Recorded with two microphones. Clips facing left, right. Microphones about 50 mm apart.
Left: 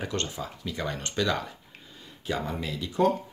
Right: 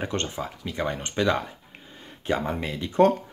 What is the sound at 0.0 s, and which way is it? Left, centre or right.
Speech, right.